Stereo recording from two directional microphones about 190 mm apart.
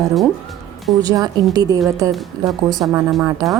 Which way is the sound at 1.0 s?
20° right (ahead or behind).